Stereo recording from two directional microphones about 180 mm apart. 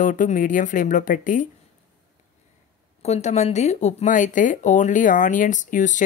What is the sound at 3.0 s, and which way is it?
Speech, 40° left (ahead or behind).